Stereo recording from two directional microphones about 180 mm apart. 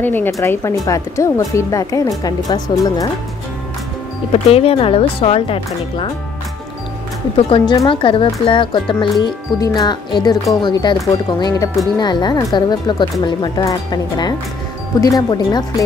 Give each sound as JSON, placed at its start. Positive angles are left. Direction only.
{"t": 0.0, "sound": "speech", "side_deg": 10}
{"t": 4.3, "sound": "speech", "side_deg": 35}
{"t": 7.3, "sound": "speech", "side_deg": 30}